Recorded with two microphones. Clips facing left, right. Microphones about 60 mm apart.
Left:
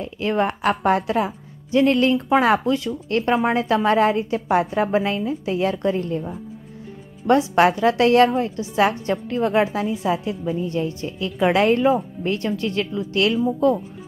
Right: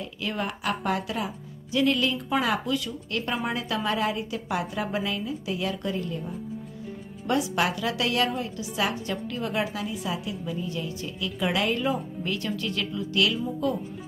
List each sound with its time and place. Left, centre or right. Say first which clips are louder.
0.0 s a woman's voice: left 9 dB; left